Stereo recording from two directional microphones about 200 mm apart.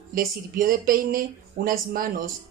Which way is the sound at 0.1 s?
45° right (ahead or behind).